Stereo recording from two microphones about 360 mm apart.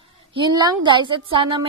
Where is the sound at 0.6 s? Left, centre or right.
Centre.